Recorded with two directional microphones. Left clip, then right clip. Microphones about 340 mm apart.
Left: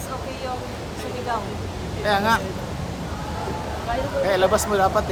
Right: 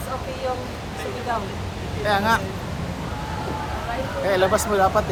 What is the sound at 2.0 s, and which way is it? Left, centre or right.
Speech, centre.